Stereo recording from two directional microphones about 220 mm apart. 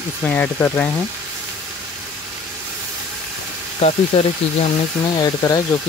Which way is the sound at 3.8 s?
30° left (ahead or behind).